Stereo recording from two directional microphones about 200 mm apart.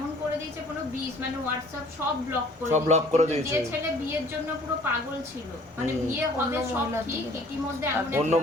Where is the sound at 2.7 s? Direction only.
35° right (ahead or behind).